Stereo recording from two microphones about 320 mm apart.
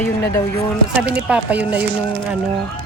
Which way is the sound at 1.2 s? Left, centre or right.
Centre.